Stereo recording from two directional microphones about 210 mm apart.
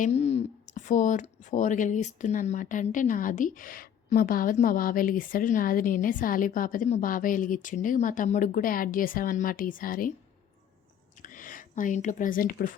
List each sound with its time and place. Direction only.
0.0 s speech: 30° left (ahead or behind)
11.2 s speech: 40° left (ahead or behind)